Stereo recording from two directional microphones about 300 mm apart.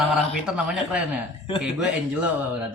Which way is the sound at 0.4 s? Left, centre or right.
Centre.